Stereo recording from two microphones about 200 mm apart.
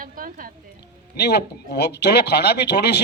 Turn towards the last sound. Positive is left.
turn(degrees=55)  # may be behind; listen again after turning